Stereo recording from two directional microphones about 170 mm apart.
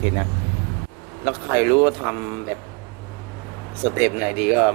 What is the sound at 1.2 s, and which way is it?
Speech, 15° right (ahead or behind).